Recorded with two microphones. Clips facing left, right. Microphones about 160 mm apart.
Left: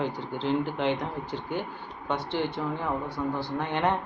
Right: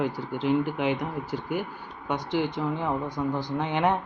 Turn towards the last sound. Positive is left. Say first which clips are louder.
# right 2 dB
turn(degrees=-15)  # may be behind; listen again after turning